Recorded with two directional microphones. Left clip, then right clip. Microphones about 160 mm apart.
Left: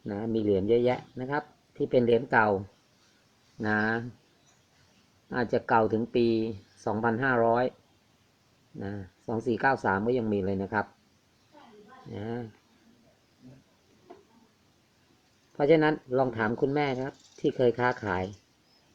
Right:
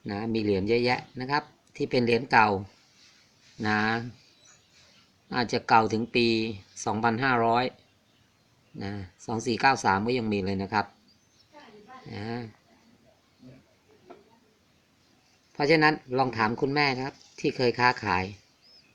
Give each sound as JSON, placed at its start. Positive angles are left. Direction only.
{"t": 0.0, "sound": "speech", "side_deg": -20}
{"t": 3.6, "sound": "speech", "side_deg": -15}
{"t": 5.3, "sound": "speech", "side_deg": -10}
{"t": 6.2, "sound": "speech", "side_deg": 30}
{"t": 6.8, "sound": "speech", "side_deg": -10}
{"t": 8.8, "sound": "speech", "side_deg": -10}
{"t": 12.1, "sound": "speech", "side_deg": -10}
{"t": 15.5, "sound": "speech", "side_deg": -10}